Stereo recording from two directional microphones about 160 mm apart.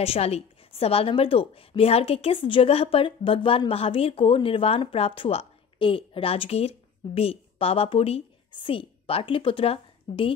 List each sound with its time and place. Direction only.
0.0 s a woman's voice: 40° left (ahead or behind)